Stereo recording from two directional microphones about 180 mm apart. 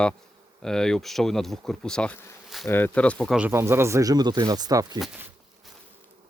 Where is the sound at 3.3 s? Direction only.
10° right (ahead or behind).